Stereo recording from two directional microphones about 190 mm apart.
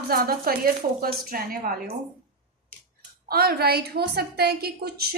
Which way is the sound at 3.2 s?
55° right (ahead or behind).